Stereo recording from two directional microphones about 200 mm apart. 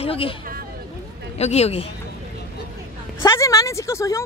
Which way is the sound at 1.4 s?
30° left (ahead or behind).